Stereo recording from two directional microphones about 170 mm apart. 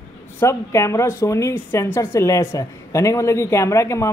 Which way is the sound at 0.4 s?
15° left (ahead or behind).